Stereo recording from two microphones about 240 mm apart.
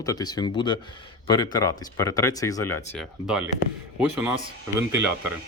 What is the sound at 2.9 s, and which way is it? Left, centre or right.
Speech, centre.